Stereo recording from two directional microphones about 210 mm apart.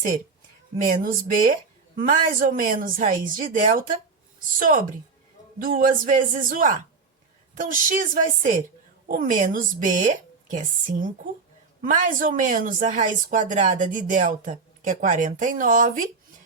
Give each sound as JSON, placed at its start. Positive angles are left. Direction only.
{"t": 0.9, "sound": "a woman's voice", "side_deg": -40}